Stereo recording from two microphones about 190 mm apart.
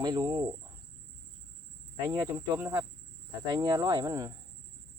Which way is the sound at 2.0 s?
15° right (ahead or behind).